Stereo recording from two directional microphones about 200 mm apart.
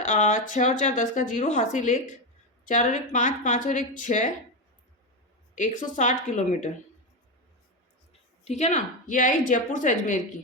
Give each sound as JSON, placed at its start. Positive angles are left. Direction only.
{"t": 0.0, "sound": "a woman's voice", "side_deg": 40}
{"t": 5.5, "sound": "a woman's voice", "side_deg": 40}
{"t": 8.4, "sound": "a woman's voice", "side_deg": 35}